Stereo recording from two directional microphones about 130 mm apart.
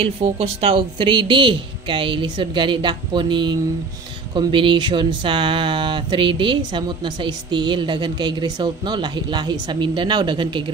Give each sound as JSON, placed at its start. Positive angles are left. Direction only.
{"t": 0.0, "sound": "speech", "side_deg": -50}